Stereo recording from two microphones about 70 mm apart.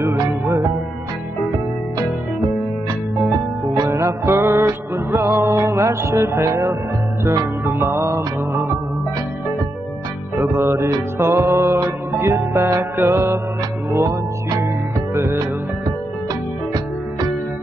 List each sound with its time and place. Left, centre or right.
3.3 s music: right
3.9 s music: right
7.9 s music: right
10.4 s music: right
12.9 s music: right